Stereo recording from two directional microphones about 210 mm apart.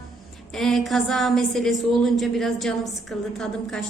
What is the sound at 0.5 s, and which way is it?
A woman's voice, centre (ahead or behind).